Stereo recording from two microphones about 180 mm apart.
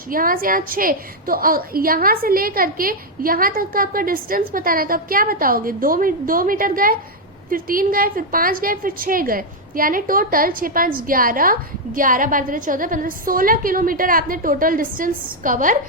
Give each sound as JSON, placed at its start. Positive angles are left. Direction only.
{"t": 0.1, "sound": "a woman's voice", "side_deg": -50}